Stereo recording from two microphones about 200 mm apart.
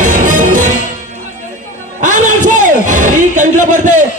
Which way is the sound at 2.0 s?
40° right (ahead or behind).